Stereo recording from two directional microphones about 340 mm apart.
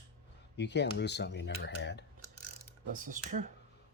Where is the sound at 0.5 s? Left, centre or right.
Left.